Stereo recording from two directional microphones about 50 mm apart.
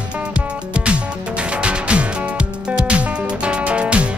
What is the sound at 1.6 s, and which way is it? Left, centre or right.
Music, right.